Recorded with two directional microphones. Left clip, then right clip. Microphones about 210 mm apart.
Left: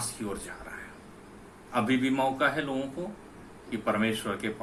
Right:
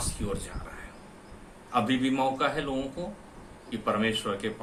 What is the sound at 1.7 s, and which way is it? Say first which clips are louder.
Speech: right 1 dB; 15° right (ahead or behind).